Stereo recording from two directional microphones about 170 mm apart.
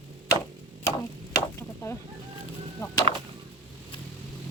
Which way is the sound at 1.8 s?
20° left (ahead or behind).